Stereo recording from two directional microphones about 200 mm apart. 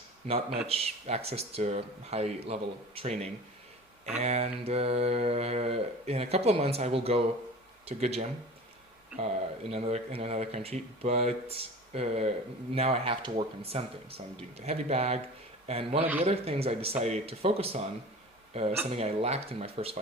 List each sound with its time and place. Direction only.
0.7 s speech: 30° right (ahead or behind)